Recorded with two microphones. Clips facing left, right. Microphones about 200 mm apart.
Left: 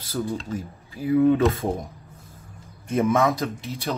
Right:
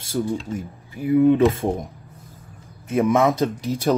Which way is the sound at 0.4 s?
Centre (ahead or behind).